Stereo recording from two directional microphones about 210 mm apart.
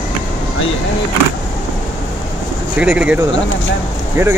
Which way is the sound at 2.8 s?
5° right (ahead or behind).